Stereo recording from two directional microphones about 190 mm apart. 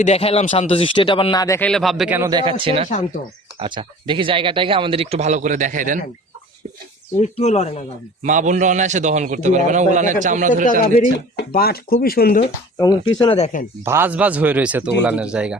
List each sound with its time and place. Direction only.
0.0 s speech: 35° left (ahead or behind); by 2.1 s centre (ahead or behind)
2.1 s speech: 15° right (ahead or behind)
2.4 s speech: 25° right (ahead or behind); by 6.0 s 45° right (ahead or behind)
7.2 s speech: 35° left (ahead or behind)
8.2 s a man's voice: 40° right (ahead or behind)
10.7 s speech: 40° left (ahead or behind)
11.3 s speech: 55° left (ahead or behind)
13.1 s speech: 25° left (ahead or behind)
13.8 s speech: 10° right (ahead or behind)